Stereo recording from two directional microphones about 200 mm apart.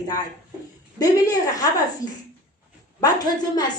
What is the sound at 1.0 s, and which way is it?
A woman's voice, 20° left (ahead or behind).